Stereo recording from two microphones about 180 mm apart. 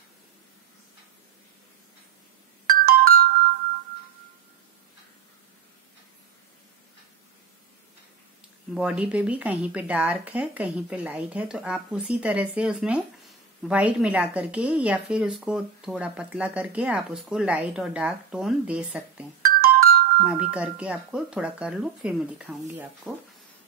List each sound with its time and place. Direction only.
2.8 s music: 55° right (ahead or behind)
8.7 s speech: 5° right (ahead or behind)
19.4 s music: 55° right (ahead or behind)
20.2 s speech: 5° right (ahead or behind)